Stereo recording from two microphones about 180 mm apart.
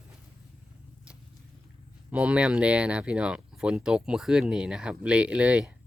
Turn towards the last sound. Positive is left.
turn(degrees=-5)  # may be behind; listen again after turning